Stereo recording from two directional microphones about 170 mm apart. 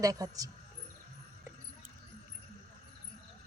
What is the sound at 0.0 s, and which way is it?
Speech, 20° right (ahead or behind).